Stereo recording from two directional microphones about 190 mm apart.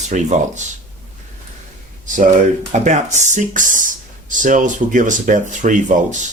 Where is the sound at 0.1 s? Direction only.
40° right (ahead or behind).